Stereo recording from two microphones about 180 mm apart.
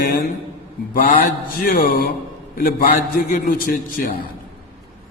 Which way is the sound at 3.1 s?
50° left (ahead or behind).